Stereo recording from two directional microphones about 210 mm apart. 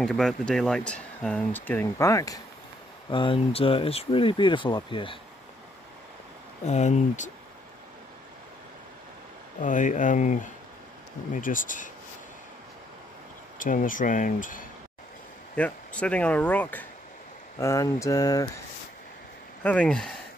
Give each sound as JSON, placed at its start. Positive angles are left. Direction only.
{"t": 0.0, "sound": "speech", "side_deg": 5}
{"t": 6.6, "sound": "speech", "side_deg": 35}
{"t": 9.6, "sound": "speech", "side_deg": 35}
{"t": 13.6, "sound": "speech", "side_deg": 40}
{"t": 15.5, "sound": "speech", "side_deg": 5}
{"t": 19.6, "sound": "speech", "side_deg": 5}